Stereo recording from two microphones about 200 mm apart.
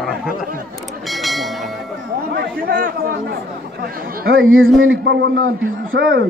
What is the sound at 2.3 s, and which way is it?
Chatter, 45° right (ahead or behind).